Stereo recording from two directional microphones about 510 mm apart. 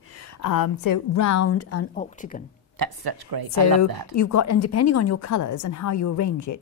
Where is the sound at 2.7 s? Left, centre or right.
Right.